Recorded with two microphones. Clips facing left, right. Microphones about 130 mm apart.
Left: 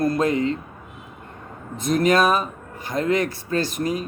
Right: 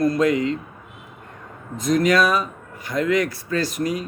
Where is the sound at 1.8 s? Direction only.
25° left (ahead or behind).